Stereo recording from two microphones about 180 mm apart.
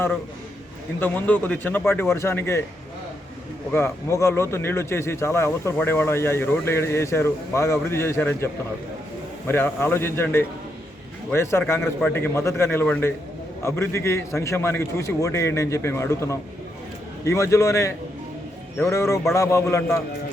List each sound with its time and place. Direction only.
0.9 s speech: 10° left (ahead or behind)
3.7 s speech: 15° left (ahead or behind)
9.5 s speech: 10° left (ahead or behind)